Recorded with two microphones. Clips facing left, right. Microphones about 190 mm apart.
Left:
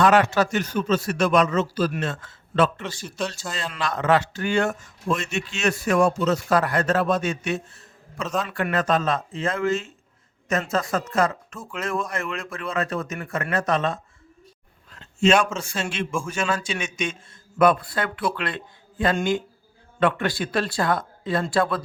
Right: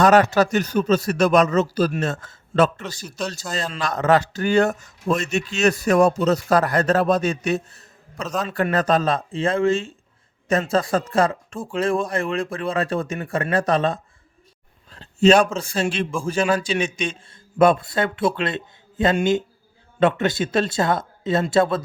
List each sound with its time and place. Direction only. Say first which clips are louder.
0.0 s a man's voice: right 3 dB; 40° right (ahead or behind); by 21.8 s 25° right (ahead or behind)